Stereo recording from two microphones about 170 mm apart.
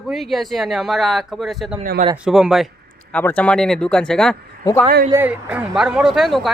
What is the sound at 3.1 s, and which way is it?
Speech, 10° left (ahead or behind).